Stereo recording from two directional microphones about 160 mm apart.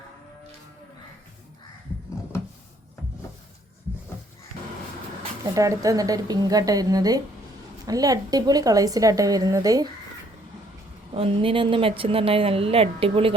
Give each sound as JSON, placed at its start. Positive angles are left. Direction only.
{"t": 5.4, "sound": "speech", "side_deg": -20}
{"t": 11.1, "sound": "a woman's voice", "side_deg": -35}